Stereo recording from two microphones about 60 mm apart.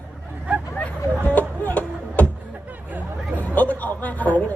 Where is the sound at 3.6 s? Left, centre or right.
Left.